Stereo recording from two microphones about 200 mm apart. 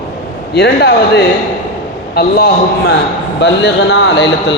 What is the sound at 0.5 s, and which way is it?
A man's voice, 55° left (ahead or behind).